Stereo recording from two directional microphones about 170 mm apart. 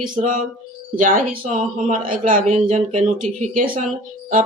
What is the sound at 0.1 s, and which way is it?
Speech, 50° right (ahead or behind).